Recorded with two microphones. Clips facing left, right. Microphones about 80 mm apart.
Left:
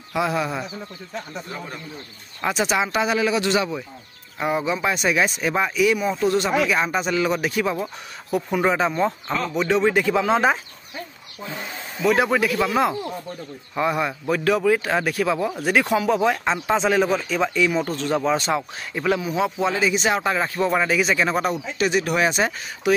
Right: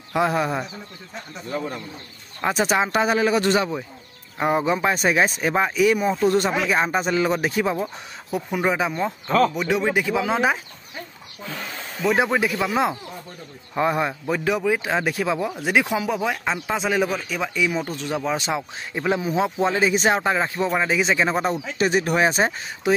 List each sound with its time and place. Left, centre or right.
0.1 s speech: right
2.5 s speech: right
8.4 s speech: centre
12.1 s speech: right
20.3 s speech: centre
21.7 s speech: right